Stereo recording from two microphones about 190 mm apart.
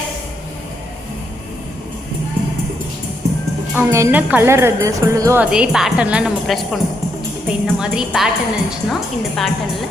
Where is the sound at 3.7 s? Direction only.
15° right (ahead or behind).